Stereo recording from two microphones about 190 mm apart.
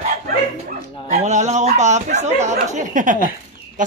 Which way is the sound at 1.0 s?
40° right (ahead or behind).